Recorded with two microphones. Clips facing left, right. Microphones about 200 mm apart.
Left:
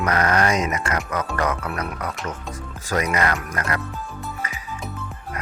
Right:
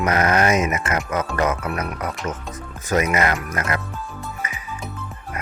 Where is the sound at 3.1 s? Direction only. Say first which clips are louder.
Right 2 dB; 20° right (ahead or behind).